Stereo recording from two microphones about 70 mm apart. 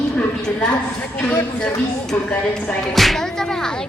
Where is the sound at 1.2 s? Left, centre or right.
Centre.